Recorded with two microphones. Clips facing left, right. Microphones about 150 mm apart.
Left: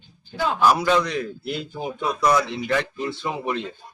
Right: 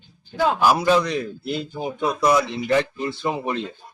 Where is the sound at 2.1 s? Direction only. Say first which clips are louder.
Right 1 dB; 10° right (ahead or behind).